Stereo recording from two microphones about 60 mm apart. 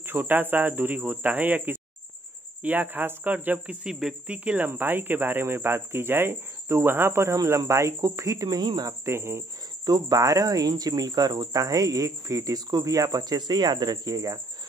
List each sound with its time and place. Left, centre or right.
0.0 s speech: right
3.8 s speech: centre
4.3 s speech: right
4.6 s speech: right
7.4 s speech: right
9.0 s speech: right
9.8 s speech: right